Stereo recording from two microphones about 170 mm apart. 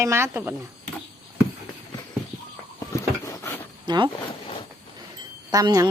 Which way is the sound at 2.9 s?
20° left (ahead or behind).